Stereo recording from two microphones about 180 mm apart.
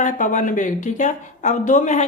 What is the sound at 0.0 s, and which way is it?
Speech, 45° left (ahead or behind).